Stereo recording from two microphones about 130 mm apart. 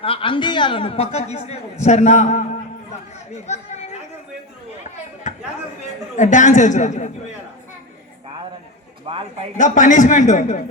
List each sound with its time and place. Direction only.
0.0 s a man's voice: 45° left (ahead or behind); by 3.8 s 60° left (ahead or behind)
5.2 s a sound: 65° left (ahead or behind)
6.1 s a man's voice: 70° left (ahead or behind)
9.1 s a man's voice: 50° right (ahead or behind)
9.6 s a man's voice: 75° left (ahead or behind)